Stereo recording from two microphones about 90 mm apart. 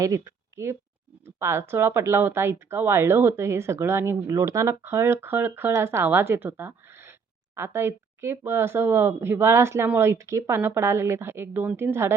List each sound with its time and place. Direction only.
0.0 s speech: 35° right (ahead or behind)